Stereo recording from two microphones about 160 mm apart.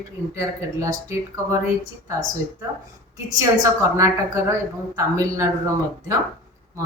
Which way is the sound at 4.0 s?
20° right (ahead or behind).